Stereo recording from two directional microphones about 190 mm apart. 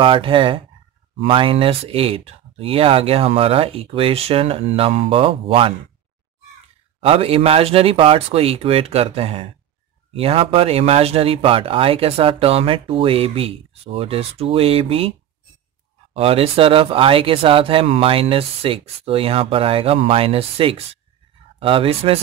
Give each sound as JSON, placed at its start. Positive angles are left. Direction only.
{"t": 0.0, "sound": "speech", "side_deg": -25}
{"t": 7.0, "sound": "speech", "side_deg": -30}